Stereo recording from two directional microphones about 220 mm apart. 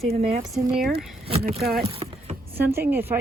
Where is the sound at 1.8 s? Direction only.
25° right (ahead or behind).